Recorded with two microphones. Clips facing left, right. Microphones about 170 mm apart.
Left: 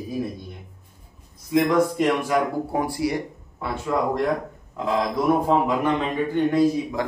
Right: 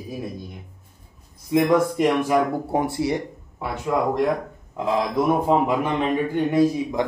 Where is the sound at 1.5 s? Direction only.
20° right (ahead or behind).